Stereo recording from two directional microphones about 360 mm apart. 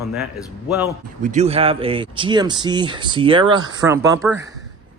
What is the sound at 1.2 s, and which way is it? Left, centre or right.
Speech, centre.